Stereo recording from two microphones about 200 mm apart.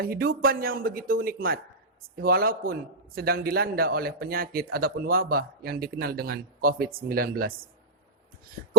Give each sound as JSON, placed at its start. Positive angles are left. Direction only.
{"t": 0.0, "sound": "a man's voice", "side_deg": -45}